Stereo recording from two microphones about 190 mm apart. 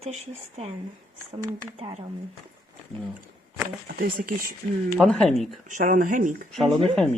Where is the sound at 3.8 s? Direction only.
50° right (ahead or behind).